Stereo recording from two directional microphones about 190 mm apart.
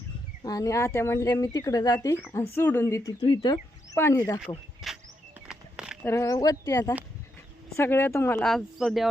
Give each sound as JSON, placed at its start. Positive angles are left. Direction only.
{"t": 0.4, "sound": "speech", "side_deg": 20}
{"t": 4.8, "sound": "a sound", "side_deg": 0}
{"t": 6.0, "sound": "speech", "side_deg": 15}